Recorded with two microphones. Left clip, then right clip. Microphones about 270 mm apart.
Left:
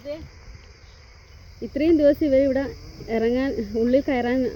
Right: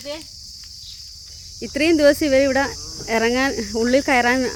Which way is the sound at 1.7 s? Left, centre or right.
Centre.